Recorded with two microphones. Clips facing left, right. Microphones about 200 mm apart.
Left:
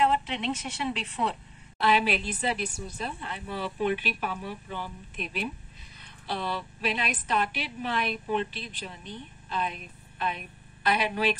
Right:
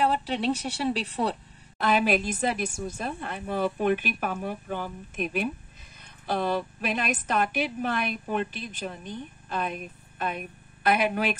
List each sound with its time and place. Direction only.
0.0 s a woman's voice: 35° right (ahead or behind)
1.8 s a woman's voice: 45° right (ahead or behind)